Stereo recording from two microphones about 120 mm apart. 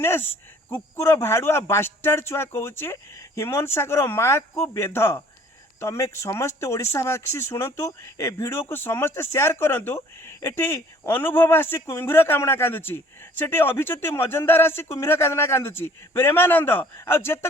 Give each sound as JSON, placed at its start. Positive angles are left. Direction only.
{"t": 0.0, "sound": "speech", "side_deg": 20}